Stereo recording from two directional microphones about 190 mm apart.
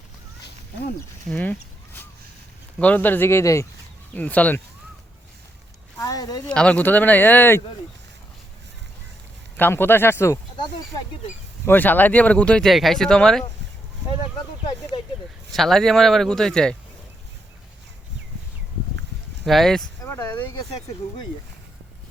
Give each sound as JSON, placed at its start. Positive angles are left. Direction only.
{"t": 1.3, "sound": "speech", "side_deg": 10}
{"t": 2.7, "sound": "speech", "side_deg": 10}
{"t": 6.0, "sound": "speech", "side_deg": 20}
{"t": 6.5, "sound": "speech", "side_deg": 5}
{"t": 9.6, "sound": "speech", "side_deg": 10}
{"t": 11.6, "sound": "speech", "side_deg": 10}
{"t": 14.9, "sound": "a sound", "side_deg": 25}
{"t": 15.5, "sound": "speech", "side_deg": 0}
{"t": 19.5, "sound": "speech", "side_deg": 0}
{"t": 20.0, "sound": "speech", "side_deg": 15}